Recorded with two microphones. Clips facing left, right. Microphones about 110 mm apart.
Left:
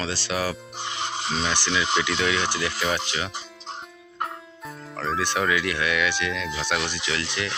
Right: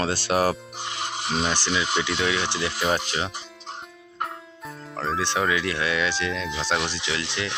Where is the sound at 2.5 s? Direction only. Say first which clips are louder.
Even; 25° right (ahead or behind).